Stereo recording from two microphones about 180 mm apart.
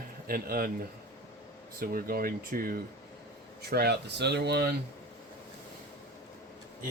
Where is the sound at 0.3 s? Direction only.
55° right (ahead or behind).